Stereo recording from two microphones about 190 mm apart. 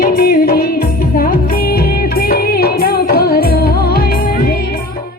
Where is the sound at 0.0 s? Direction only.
55° left (ahead or behind).